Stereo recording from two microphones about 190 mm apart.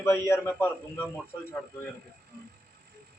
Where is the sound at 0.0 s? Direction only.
15° left (ahead or behind).